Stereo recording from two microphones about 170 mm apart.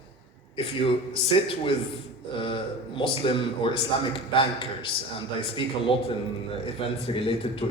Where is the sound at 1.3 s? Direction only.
30° left (ahead or behind).